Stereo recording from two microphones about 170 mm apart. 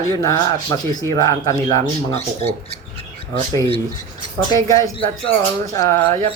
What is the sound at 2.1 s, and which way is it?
Speech, 40° left (ahead or behind).